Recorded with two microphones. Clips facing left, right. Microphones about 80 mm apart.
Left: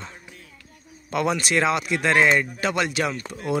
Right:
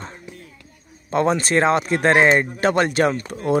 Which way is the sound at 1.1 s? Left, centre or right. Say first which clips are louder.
Right 4 dB; right.